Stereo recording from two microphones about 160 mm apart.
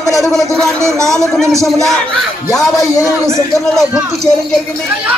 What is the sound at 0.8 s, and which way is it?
Speech, 20° right (ahead or behind).